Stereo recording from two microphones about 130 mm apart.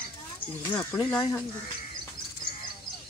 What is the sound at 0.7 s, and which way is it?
Speech, 30° left (ahead or behind).